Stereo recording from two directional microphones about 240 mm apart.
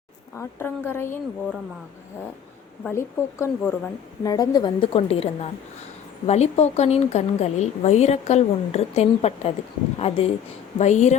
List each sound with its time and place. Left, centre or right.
0.3 s speech: centre
2.9 s a woman's voice: centre; by 11.2 s left